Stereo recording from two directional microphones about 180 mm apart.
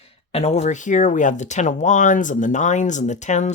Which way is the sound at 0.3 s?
35° left (ahead or behind).